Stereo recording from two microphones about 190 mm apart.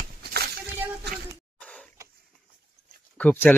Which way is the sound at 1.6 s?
5° left (ahead or behind).